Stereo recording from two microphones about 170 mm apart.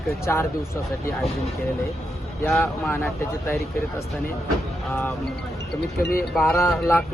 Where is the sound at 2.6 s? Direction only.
10° left (ahead or behind).